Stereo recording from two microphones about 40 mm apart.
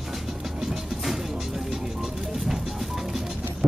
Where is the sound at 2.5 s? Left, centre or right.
Centre.